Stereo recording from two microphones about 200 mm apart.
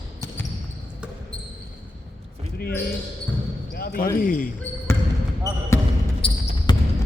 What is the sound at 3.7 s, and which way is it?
Basketball bounce, 50° left (ahead or behind).